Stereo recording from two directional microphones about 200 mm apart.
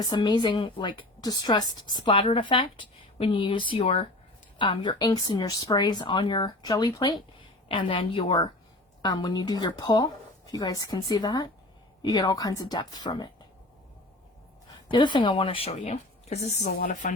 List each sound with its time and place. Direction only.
0.0 s a woman's voice: 20° left (ahead or behind)
14.7 s speech: 25° left (ahead or behind); by 17.2 s 40° left (ahead or behind)